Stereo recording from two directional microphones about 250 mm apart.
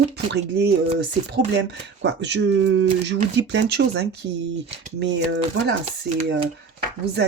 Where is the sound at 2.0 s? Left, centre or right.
Right.